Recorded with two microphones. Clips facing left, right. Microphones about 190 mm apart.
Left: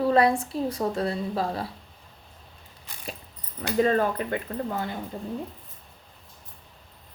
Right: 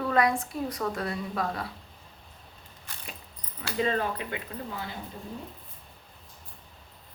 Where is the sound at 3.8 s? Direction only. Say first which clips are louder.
Left 6 dB; 45° left (ahead or behind).